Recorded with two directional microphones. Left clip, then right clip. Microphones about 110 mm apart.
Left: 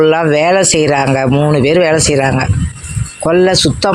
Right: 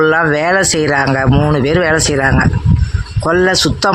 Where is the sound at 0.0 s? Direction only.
20° left (ahead or behind).